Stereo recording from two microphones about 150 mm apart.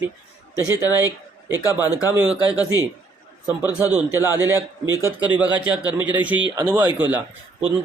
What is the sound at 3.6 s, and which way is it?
Speech, 10° right (ahead or behind).